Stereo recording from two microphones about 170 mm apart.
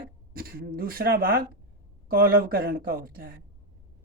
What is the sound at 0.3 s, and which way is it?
Speech, 60° right (ahead or behind).